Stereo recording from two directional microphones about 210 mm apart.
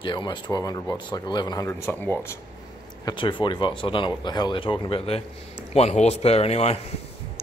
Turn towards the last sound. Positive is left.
turn(degrees=30)  # may be behind; listen again after turning